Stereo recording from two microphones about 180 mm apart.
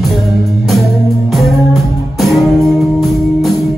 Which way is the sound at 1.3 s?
Centre (ahead or behind).